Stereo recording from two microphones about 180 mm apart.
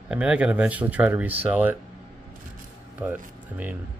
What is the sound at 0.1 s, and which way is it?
Speech, 5° right (ahead or behind).